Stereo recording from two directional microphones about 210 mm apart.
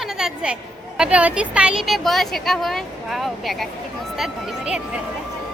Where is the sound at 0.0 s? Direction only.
5° right (ahead or behind).